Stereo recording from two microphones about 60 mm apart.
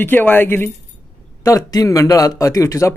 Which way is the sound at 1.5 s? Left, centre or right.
Left.